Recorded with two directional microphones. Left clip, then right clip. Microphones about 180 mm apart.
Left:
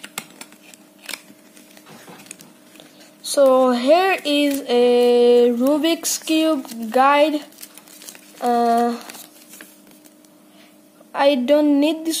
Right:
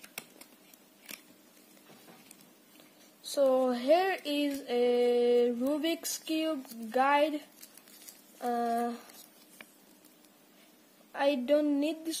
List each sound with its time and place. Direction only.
3.2 s speech: centre (ahead or behind)
11.1 s speech: 5° left (ahead or behind)